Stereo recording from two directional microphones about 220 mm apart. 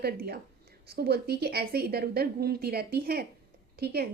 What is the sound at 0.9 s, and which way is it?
Speech, 45° right (ahead or behind).